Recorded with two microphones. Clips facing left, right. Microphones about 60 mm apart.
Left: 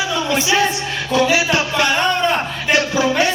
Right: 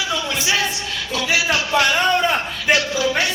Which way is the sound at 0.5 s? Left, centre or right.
Left.